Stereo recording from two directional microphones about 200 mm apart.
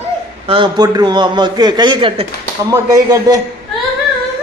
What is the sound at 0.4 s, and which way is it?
A man's voice, 25° right (ahead or behind).